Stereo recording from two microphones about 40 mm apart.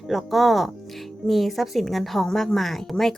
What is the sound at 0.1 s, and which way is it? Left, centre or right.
A woman's voice, centre.